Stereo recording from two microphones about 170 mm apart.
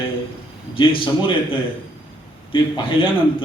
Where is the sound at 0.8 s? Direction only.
30° left (ahead or behind).